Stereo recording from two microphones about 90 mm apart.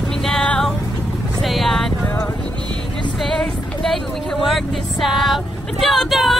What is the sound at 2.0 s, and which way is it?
Music, 20° left (ahead or behind).